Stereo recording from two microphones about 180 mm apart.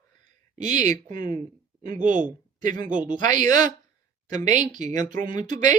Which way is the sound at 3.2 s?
45° right (ahead or behind).